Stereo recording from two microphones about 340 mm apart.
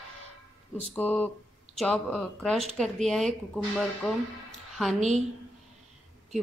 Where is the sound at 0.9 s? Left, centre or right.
Centre.